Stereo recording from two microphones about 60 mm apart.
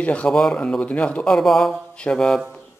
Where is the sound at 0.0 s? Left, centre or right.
Left.